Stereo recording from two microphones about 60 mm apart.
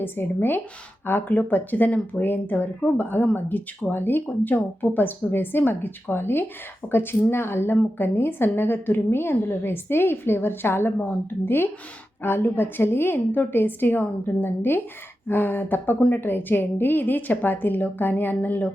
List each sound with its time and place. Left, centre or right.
0.0 s speech: left